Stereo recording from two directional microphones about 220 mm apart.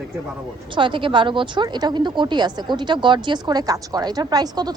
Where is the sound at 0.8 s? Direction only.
20° right (ahead or behind).